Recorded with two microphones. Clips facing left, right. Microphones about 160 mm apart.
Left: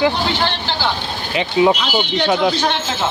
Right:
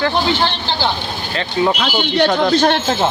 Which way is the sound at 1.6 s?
15° left (ahead or behind).